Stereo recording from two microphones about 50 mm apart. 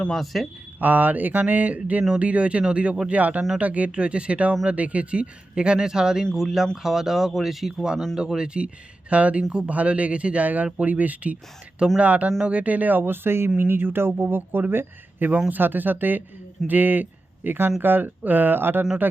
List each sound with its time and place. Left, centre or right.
0.1 s speech: centre
0.8 s speech: right